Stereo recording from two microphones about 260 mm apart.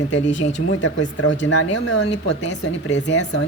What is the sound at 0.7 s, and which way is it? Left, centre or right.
Speech, left.